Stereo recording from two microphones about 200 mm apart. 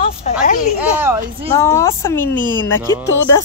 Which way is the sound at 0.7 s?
10° right (ahead or behind).